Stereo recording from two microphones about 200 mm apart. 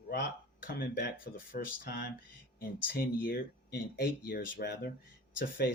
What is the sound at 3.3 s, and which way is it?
Speech, 50° left (ahead or behind).